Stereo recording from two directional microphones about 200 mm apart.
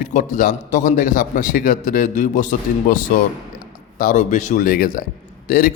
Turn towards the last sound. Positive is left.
turn(degrees=45)  # may be behind; listen again after turning